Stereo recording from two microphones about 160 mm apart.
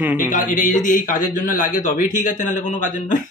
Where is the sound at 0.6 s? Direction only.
55° left (ahead or behind).